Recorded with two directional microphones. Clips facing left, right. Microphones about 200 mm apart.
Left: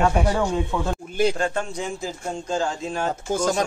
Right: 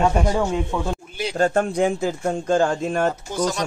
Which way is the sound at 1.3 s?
45° right (ahead or behind).